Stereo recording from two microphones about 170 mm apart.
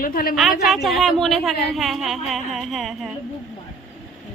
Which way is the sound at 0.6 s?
Centre (ahead or behind).